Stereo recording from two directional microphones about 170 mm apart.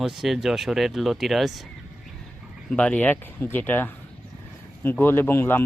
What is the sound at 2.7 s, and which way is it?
Speech, 5° left (ahead or behind).